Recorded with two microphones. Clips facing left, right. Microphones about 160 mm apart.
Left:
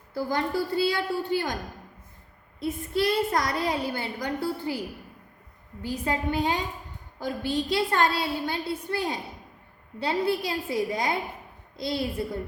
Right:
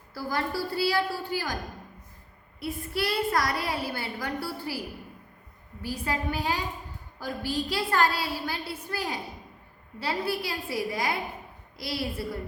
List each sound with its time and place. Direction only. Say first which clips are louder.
0.1 s a woman's voice: left 3 dB; 20° left (ahead or behind)
2.6 s a woman's voice: left 4 dB; 20° left (ahead or behind)
5.8 s a woman's voice: left 3 dB; 20° left (ahead or behind)